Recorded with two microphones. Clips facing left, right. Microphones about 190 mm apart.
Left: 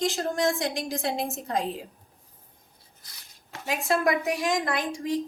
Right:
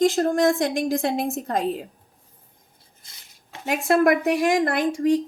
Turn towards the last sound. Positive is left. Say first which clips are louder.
# right 7 dB
turn(degrees=-55)  # may be behind; listen again after turning